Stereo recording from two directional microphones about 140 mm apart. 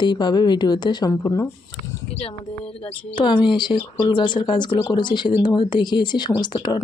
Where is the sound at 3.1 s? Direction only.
35° left (ahead or behind).